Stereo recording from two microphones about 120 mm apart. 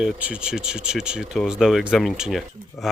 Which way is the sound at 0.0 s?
10° right (ahead or behind).